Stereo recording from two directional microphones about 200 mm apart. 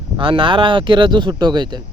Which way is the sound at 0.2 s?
25° right (ahead or behind).